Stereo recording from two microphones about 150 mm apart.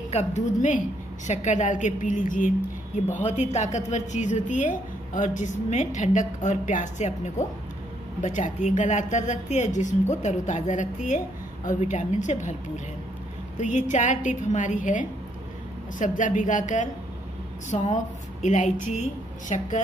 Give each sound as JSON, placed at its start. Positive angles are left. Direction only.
{"t": 0.1, "sound": "a woman's voice", "side_deg": 50}
{"t": 3.3, "sound": "a woman's voice", "side_deg": 50}